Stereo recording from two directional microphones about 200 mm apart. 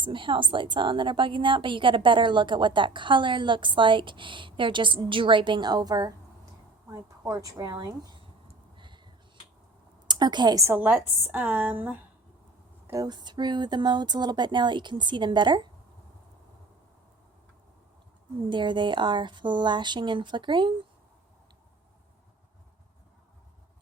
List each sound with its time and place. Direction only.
0.0 s a woman's voice: 25° right (ahead or behind)
8.7 s a sound: 25° right (ahead or behind)
10.1 s a woman's voice: 20° right (ahead or behind)
18.4 s a woman's voice: 25° right (ahead or behind)